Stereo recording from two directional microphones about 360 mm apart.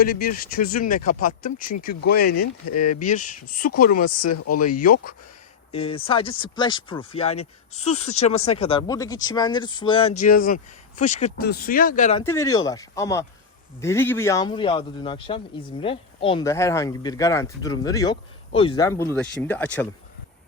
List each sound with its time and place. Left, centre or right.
0.0 s speech: left
2.3 s speech: left
2.7 s speech: left
4.0 s speech: left
4.4 s speech: left
4.7 s speech: left
12.2 s speech: centre